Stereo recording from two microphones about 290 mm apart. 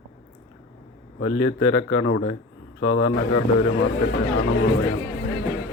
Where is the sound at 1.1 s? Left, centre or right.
Left.